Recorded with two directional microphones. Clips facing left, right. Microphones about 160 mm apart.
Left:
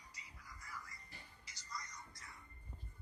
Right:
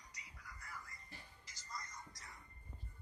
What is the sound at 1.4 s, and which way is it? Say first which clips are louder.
Music: left 1 dB; 50° right (ahead or behind).